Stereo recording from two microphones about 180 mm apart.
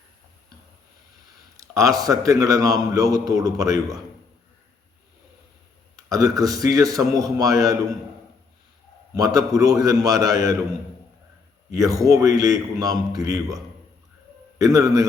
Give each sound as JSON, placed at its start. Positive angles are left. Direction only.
{"t": 1.5, "sound": "a man's voice", "side_deg": -20}
{"t": 6.1, "sound": "a man's voice", "side_deg": -20}
{"t": 9.1, "sound": "a man's voice", "side_deg": -20}
{"t": 11.8, "sound": "a man's voice", "side_deg": -20}
{"t": 14.6, "sound": "a man's voice", "side_deg": -20}